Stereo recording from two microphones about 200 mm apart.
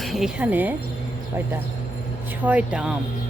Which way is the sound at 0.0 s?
Centre (ahead or behind).